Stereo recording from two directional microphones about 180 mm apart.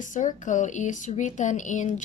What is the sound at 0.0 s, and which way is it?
A woman's voice, 45° left (ahead or behind).